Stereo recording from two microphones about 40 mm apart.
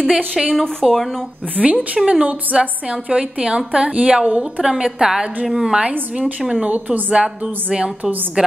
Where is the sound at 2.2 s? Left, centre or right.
Right.